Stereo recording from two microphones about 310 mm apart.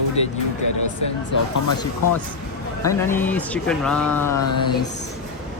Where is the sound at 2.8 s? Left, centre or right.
Centre.